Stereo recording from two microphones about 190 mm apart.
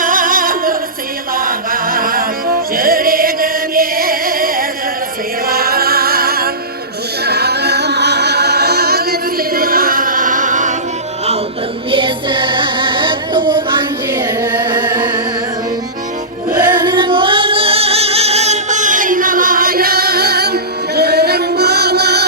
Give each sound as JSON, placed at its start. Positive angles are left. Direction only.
{"t": 0.0, "sound": "singing", "side_deg": -45}
{"t": 1.4, "sound": "a capella", "side_deg": -50}
{"t": 2.7, "sound": "chant", "side_deg": -50}
{"t": 5.5, "sound": "music", "side_deg": -50}
{"t": 11.9, "sound": "child singing", "side_deg": -25}
{"t": 14.1, "sound": "carnatic music", "side_deg": -10}
{"t": 14.6, "sound": "music", "side_deg": -25}
{"t": 16.5, "sound": "music", "side_deg": -25}